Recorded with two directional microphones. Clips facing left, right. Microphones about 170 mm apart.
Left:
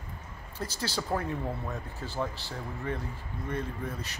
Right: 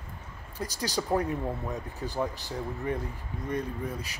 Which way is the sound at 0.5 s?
15° right (ahead or behind).